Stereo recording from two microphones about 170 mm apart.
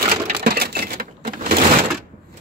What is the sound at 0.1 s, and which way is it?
Sewing machine, 65° right (ahead or behind).